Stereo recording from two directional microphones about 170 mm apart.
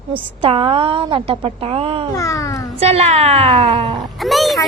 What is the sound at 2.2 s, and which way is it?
Speech, 20° left (ahead or behind).